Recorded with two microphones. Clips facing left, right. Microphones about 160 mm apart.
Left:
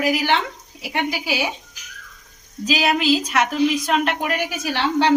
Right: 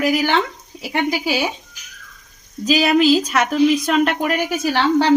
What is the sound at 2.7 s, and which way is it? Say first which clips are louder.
A woman's voice: right 5 dB; 45° right (ahead or behind).